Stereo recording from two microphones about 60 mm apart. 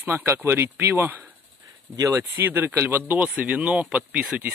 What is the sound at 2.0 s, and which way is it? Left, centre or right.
Speech, right.